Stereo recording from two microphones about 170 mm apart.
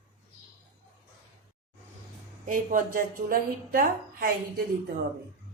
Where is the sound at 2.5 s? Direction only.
50° right (ahead or behind).